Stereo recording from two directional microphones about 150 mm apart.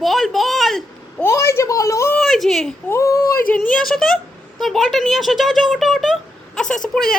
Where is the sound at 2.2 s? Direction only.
5° left (ahead or behind).